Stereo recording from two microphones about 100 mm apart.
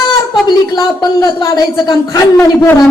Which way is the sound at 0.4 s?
45° left (ahead or behind).